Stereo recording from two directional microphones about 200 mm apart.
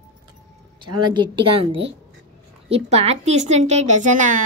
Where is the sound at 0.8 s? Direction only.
20° right (ahead or behind); by 4.4 s 40° right (ahead or behind).